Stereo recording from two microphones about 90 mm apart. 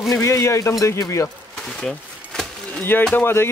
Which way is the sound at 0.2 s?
35° left (ahead or behind).